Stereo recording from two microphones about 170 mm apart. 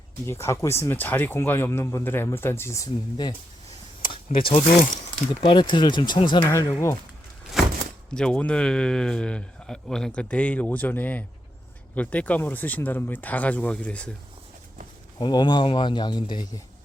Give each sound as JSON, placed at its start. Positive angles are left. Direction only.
{"t": 0.3, "sound": "speech", "side_deg": 15}
{"t": 4.4, "sound": "speech", "side_deg": 30}
{"t": 6.4, "sound": "speech", "side_deg": 15}
{"t": 8.1, "sound": "speech", "side_deg": 5}
{"t": 15.2, "sound": "speech", "side_deg": 25}